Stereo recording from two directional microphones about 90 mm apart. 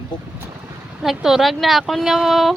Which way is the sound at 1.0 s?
5° right (ahead or behind).